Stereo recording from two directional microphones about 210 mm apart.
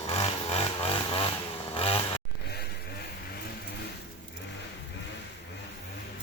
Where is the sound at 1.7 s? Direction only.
25° left (ahead or behind).